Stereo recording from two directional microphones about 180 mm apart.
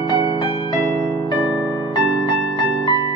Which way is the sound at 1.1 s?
15° left (ahead or behind).